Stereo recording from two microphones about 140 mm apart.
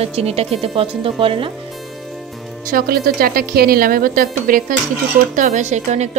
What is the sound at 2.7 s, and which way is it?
A woman's voice, 90° right.